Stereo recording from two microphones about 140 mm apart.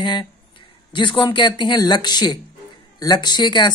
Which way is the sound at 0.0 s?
35° left (ahead or behind).